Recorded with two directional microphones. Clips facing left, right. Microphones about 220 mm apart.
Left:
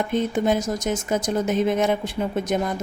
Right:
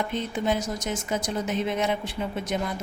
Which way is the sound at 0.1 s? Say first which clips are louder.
Left 6 dB; 50° left (ahead or behind).